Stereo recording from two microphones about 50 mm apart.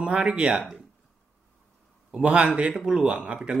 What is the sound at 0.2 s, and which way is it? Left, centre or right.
Speech, centre.